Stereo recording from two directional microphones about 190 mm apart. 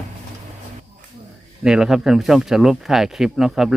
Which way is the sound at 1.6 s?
5° right (ahead or behind).